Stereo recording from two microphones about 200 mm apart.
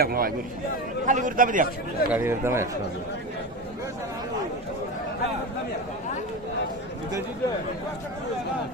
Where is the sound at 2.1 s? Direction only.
10° right (ahead or behind).